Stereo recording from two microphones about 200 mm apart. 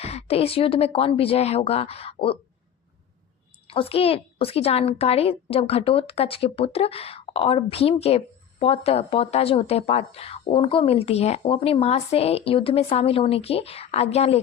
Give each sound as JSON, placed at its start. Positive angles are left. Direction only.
{"t": 0.0, "sound": "a child's voice", "side_deg": 30}
{"t": 3.7, "sound": "a child's voice", "side_deg": 30}